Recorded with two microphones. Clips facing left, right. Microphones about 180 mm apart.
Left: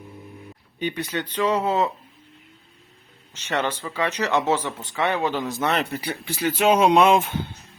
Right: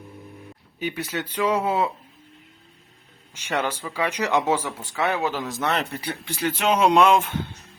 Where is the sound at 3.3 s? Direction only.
10° right (ahead or behind); by 6.7 s 5° left (ahead or behind).